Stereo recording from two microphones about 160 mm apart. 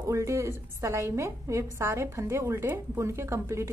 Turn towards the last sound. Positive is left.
turn(degrees=-15)  # may be behind; listen again after turning